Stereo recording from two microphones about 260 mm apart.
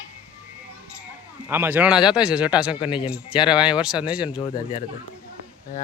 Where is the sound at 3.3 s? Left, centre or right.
Centre.